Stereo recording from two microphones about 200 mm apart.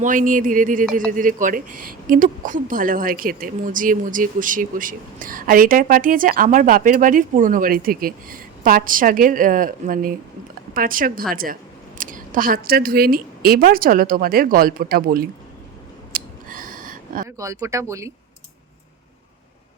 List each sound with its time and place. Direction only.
0.0 s speech: 40° right (ahead or behind)
16.1 s a sound: 45° right (ahead or behind)
17.2 s speech: 15° right (ahead or behind)